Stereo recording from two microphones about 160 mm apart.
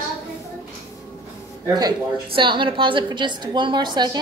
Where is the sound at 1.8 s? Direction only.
25° right (ahead or behind).